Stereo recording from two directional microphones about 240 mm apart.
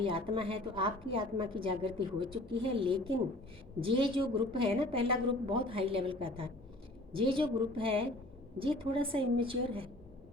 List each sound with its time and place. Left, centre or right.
0.0 s a woman's voice: right